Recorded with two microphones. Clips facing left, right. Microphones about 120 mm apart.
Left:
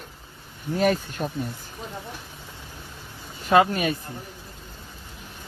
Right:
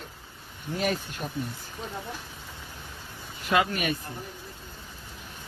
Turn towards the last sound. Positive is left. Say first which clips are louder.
# left 6 dB
turn(degrees=30)  # may be behind; listen again after turning